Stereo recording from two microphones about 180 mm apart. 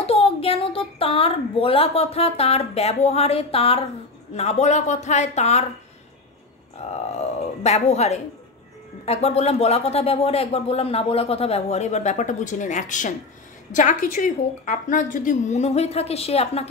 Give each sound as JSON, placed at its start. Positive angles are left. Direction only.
{"t": 0.0, "sound": "a woman's voice", "side_deg": 35}
{"t": 6.9, "sound": "a woman's voice", "side_deg": 35}